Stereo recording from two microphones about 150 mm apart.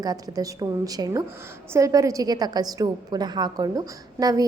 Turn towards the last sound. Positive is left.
turn(degrees=-25)  # may be behind; listen again after turning